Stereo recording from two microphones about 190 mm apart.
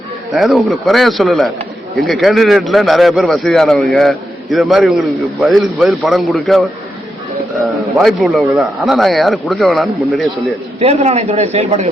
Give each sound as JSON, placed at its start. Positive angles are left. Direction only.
{"t": 0.3, "sound": "speech", "side_deg": 0}
{"t": 7.9, "sound": "speech", "side_deg": 0}
{"t": 10.8, "sound": "speech", "side_deg": -35}